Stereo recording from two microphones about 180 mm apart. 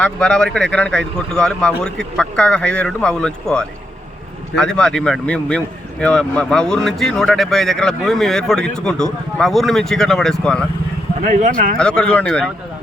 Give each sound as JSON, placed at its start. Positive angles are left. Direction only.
{"t": 0.0, "sound": "speech", "side_deg": 5}
{"t": 11.2, "sound": "speech", "side_deg": -45}
{"t": 11.8, "sound": "speech", "side_deg": 5}